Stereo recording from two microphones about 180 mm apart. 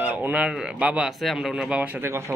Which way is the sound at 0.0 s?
10° right (ahead or behind).